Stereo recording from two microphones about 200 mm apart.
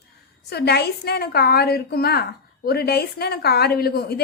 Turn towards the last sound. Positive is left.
turn(degrees=50)  # may be behind; listen again after turning